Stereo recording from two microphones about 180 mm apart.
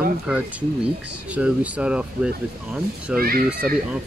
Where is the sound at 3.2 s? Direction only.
55° right (ahead or behind).